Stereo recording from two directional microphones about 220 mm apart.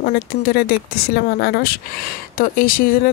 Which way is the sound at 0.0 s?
45° left (ahead or behind).